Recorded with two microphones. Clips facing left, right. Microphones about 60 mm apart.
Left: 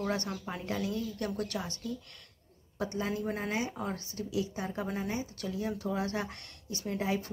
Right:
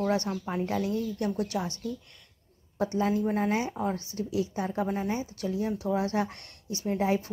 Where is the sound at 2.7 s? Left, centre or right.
Right.